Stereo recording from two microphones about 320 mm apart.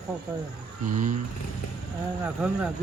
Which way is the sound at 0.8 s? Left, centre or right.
Right.